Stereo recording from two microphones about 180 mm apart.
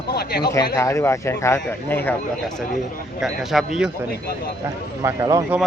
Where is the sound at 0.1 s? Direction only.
60° left (ahead or behind).